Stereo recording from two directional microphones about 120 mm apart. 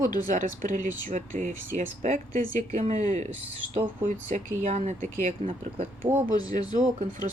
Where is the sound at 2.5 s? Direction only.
85° right.